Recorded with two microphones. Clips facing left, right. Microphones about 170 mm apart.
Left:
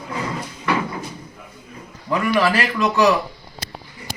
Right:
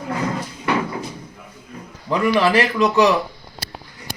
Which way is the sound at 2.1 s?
20° right (ahead or behind).